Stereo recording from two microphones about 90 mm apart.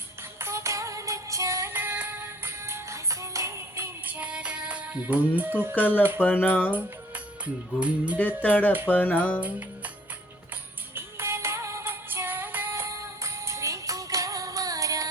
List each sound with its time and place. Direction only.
0.3 s music: 30° right (ahead or behind)
1.7 s music: 20° right (ahead or behind)
4.0 s music: 15° right (ahead or behind)
5.9 s speech: 20° right (ahead or behind)
6.2 s a sound: 20° left (ahead or behind)
7.4 s music: 15° right (ahead or behind)
8.4 s a sound: 20° left (ahead or behind)
9.4 s music: 15° right (ahead or behind)
10.9 s music: 30° right (ahead or behind)